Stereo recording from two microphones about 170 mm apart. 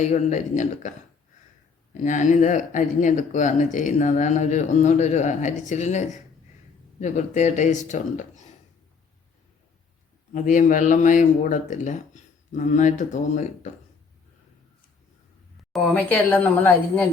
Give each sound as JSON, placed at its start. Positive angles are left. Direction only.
{"t": 0.0, "sound": "speech", "side_deg": 45}
{"t": 10.3, "sound": "speech", "side_deg": 45}
{"t": 15.7, "sound": "speech", "side_deg": 10}